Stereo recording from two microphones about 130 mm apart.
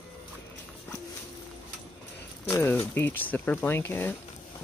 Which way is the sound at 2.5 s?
20° left (ahead or behind).